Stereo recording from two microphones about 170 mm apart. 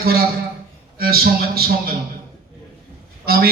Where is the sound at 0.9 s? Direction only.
65° right (ahead or behind).